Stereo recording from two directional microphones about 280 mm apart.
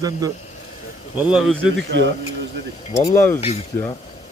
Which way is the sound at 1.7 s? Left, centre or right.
Right.